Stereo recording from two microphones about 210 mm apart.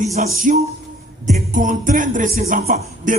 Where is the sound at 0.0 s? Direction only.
35° right (ahead or behind).